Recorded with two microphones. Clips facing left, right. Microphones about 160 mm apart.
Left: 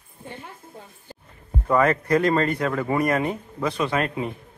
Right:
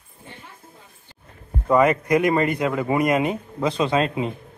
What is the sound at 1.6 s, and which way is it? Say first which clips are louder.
Speech: right 2 dB; 15° right (ahead or behind).